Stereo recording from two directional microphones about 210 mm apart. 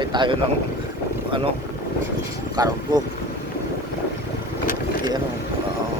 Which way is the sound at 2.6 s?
15° right (ahead or behind).